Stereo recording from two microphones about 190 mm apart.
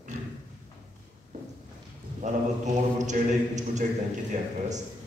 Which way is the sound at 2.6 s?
40° right (ahead or behind).